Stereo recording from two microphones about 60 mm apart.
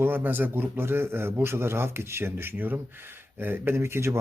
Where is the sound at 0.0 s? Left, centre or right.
Right.